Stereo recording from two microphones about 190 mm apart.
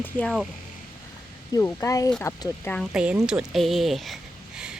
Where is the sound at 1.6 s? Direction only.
15° left (ahead or behind).